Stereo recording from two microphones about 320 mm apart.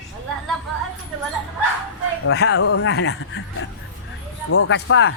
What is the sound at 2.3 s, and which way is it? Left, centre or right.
Speech, left.